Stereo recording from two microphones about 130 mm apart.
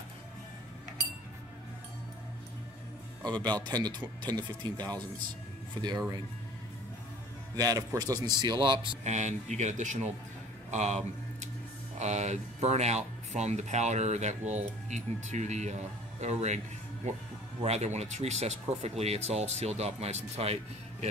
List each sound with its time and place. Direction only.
3.2 s music: 10° left (ahead or behind)
3.4 s speech: 35° right (ahead or behind)
7.5 s speech: 25° right (ahead or behind)
9.0 s speech: 65° right (ahead or behind)
12.0 s speech: 60° right (ahead or behind)